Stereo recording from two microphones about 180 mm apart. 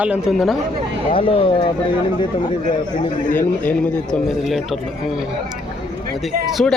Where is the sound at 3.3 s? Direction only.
5° left (ahead or behind).